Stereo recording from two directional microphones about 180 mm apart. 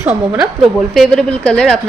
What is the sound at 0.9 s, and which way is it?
Speech, 5° left (ahead or behind).